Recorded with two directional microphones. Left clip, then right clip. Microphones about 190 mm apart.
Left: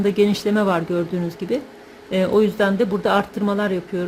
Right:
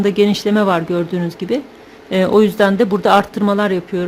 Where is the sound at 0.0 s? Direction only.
10° right (ahead or behind).